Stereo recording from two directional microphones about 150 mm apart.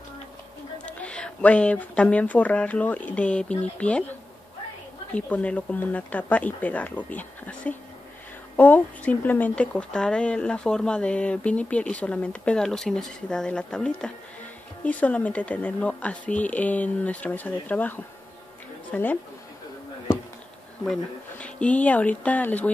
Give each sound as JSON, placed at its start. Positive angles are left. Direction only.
{"t": 0.8, "sound": "speech", "side_deg": 10}
{"t": 5.1, "sound": "speech", "side_deg": 10}
{"t": 20.8, "sound": "speech", "side_deg": 5}